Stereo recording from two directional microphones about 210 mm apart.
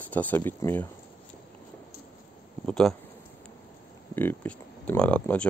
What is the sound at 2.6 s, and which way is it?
Speech, centre (ahead or behind).